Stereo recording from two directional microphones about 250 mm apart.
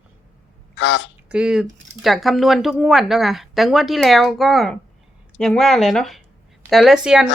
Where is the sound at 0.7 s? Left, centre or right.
Left.